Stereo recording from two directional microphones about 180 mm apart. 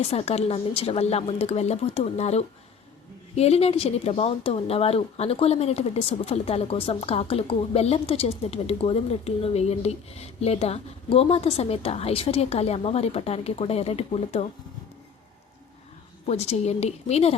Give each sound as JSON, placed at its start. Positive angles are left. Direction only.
{"t": 0.0, "sound": "speech", "side_deg": 35}
{"t": 16.2, "sound": "speech", "side_deg": 35}